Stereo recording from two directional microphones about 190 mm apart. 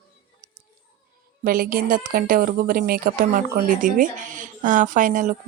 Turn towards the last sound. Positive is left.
turn(degrees=-45)  # may be behind; listen again after turning